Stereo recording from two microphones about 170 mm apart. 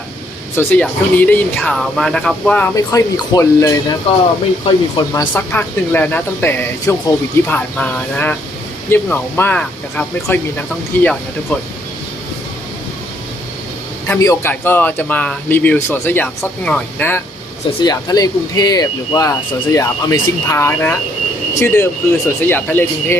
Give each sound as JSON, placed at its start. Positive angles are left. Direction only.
{"t": 0.5, "sound": "speech", "side_deg": 10}
{"t": 2.7, "sound": "speech", "side_deg": 20}
{"t": 4.1, "sound": "speech", "side_deg": 35}
{"t": 5.3, "sound": "speech", "side_deg": 10}
{"t": 14.1, "sound": "speech", "side_deg": 15}
{"t": 17.8, "sound": "speech", "side_deg": 20}